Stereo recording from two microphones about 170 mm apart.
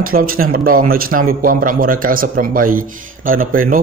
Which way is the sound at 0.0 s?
60° right (ahead or behind).